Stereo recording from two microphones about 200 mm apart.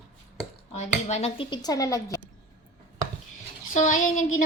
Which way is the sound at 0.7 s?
30° left (ahead or behind).